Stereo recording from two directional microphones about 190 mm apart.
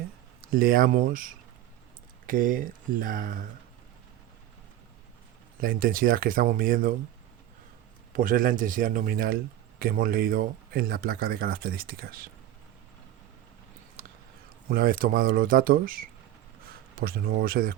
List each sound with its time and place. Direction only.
0.5 s a man's voice: 50° right (ahead or behind)
5.5 s a man's voice: 50° right (ahead or behind)
8.1 s a man's voice: 45° right (ahead or behind)
14.7 s a man's voice: 50° right (ahead or behind)